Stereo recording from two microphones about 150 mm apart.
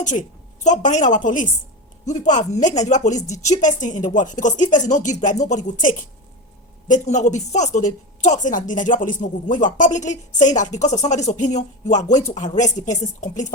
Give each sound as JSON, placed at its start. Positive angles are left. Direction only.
{"t": 0.0, "sound": "a woman's voice", "side_deg": 55}